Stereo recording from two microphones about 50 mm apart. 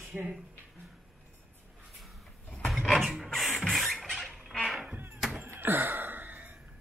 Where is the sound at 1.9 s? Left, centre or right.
Centre.